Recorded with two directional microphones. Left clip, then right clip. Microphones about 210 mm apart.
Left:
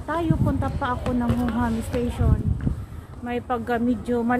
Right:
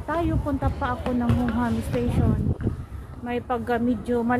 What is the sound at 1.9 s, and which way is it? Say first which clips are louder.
Speech: even; 35° left (ahead or behind).